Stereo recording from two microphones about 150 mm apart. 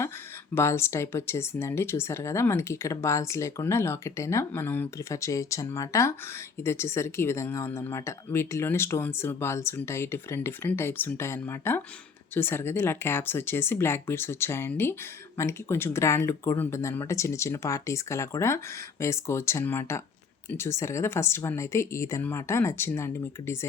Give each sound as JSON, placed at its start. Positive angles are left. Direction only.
{"t": 0.5, "sound": "speech", "side_deg": 15}